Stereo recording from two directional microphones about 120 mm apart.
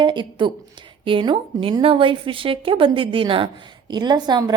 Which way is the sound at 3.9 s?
35° right (ahead or behind).